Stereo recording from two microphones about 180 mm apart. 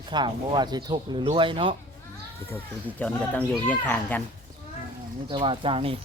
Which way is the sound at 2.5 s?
10° left (ahead or behind).